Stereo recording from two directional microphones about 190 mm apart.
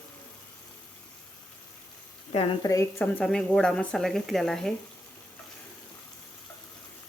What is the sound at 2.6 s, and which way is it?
Speech, 20° left (ahead or behind).